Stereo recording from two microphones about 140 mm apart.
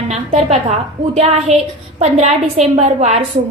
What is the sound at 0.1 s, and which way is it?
A woman's voice, 50° right (ahead or behind).